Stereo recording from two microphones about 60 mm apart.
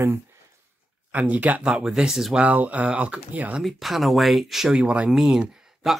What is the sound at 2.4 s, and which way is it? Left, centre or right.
Speech, right.